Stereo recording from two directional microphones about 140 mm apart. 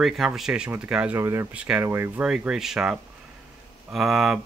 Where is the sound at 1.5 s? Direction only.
10° right (ahead or behind).